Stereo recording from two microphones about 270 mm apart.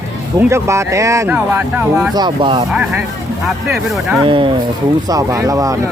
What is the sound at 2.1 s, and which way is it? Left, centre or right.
Speech, centre.